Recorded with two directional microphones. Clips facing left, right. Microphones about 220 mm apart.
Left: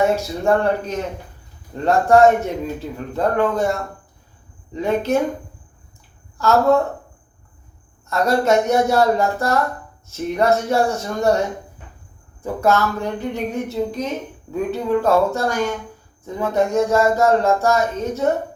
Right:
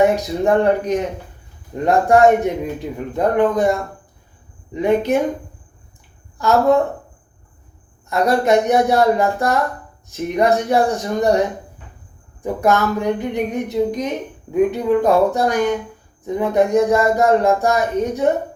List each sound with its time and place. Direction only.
0.0 s speech: 15° right (ahead or behind)
6.4 s speech: 15° right (ahead or behind)
8.1 s speech: 15° right (ahead or behind)